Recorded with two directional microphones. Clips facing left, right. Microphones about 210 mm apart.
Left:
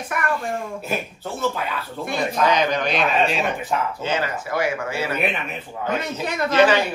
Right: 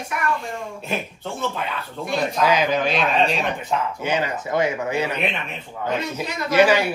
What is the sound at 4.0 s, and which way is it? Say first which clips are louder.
Speech: right 1 dB; 15° right (ahead or behind).